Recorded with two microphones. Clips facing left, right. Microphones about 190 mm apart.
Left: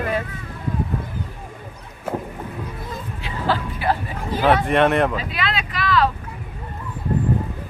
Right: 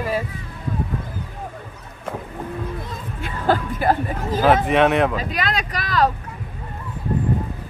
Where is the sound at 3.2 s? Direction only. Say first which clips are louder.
Right 3 dB; 50° right (ahead or behind).